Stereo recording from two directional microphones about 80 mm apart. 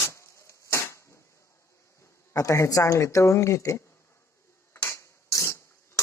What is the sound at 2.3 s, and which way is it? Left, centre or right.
Speech, left.